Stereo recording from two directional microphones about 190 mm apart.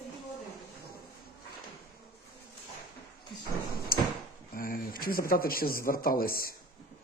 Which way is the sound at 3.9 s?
50° left (ahead or behind).